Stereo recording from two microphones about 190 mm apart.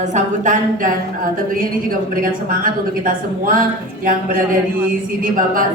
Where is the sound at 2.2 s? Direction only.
45° right (ahead or behind).